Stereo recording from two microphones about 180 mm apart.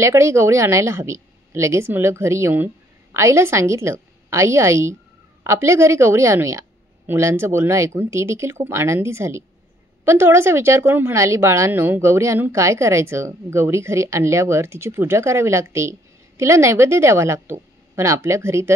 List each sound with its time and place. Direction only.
0.0 s a woman's voice: 15° right (ahead or behind)